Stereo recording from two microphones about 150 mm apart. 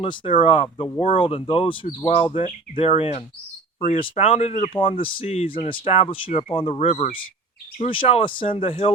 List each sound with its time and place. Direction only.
0.0 s speech: 35° left (ahead or behind)
4.7 s speech: 35° left (ahead or behind)